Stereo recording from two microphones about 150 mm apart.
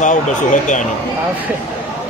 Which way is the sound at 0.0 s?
55° left (ahead or behind).